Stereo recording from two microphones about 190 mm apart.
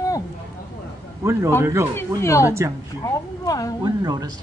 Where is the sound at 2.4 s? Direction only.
15° right (ahead or behind).